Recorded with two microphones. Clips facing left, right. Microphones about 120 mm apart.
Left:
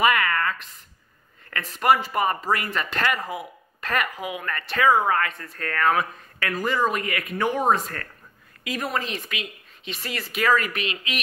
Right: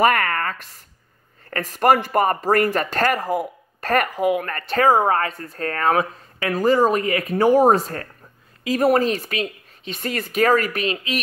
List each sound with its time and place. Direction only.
0.0 s speech: 45° right (ahead or behind)